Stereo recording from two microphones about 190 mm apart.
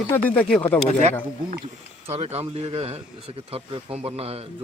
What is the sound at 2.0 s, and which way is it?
A man's voice, 35° right (ahead or behind).